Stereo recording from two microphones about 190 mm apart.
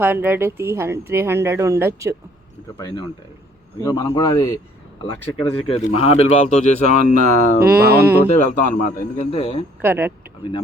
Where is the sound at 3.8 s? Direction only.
15° left (ahead or behind).